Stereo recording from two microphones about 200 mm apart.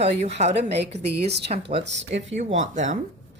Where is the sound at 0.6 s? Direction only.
55° right (ahead or behind).